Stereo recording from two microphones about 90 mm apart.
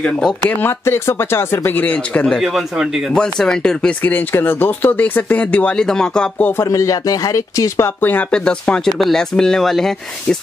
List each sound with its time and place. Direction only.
0.0 s speech: 10° left (ahead or behind)
0.5 s speech: 20° left (ahead or behind)
2.4 s speech: 5° right (ahead or behind)
3.2 s speech: 10° left (ahead or behind)
4.0 s speech: 20° left (ahead or behind)
6.6 s speech: 35° left (ahead or behind)
8.0 s speech: 20° left (ahead or behind); by 9.9 s 5° left (ahead or behind)